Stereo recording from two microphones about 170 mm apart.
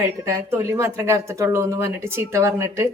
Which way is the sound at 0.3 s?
15° right (ahead or behind).